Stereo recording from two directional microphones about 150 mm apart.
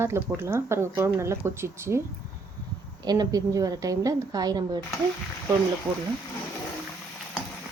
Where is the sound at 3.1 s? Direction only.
25° right (ahead or behind).